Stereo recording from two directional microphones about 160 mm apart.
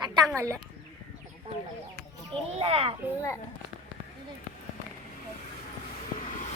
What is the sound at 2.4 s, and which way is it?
Speech, 40° right (ahead or behind).